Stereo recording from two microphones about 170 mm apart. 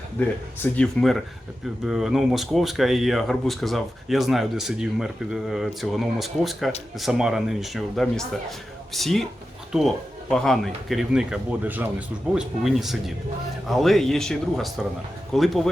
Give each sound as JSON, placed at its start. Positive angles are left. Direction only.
{"t": 0.2, "sound": "speech", "side_deg": 5}